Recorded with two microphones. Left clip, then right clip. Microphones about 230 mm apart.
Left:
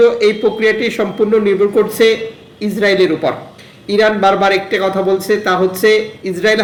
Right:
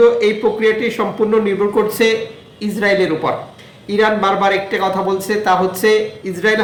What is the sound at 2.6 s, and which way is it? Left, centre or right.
A man's voice, centre.